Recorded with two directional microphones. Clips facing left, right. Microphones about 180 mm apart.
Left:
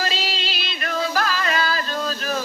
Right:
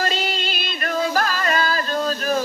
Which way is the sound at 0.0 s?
50° right (ahead or behind).